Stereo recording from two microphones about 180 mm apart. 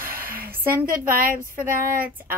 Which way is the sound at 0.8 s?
50° right (ahead or behind).